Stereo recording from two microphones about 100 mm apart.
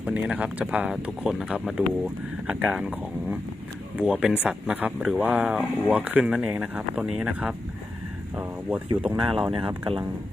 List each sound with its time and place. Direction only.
0.0 s speech: 15° right (ahead or behind)
9.0 s speech: 5° right (ahead or behind)
9.5 s speech: 55° right (ahead or behind)